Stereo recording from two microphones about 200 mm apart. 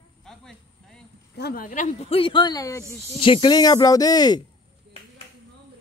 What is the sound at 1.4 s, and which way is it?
Speech, 50° left (ahead or behind).